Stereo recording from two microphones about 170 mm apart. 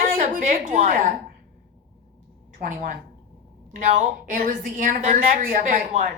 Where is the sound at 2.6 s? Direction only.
50° right (ahead or behind).